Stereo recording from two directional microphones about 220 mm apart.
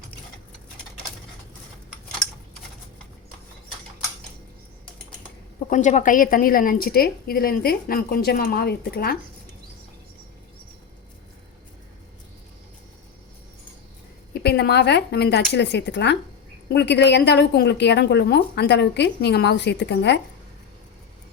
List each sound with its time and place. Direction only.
5.7 s a woman's voice: 35° left (ahead or behind)
14.4 s a woman's voice: 50° left (ahead or behind)